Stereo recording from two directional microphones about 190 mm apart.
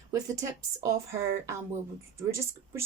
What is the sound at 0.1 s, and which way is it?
Speech, 15° right (ahead or behind).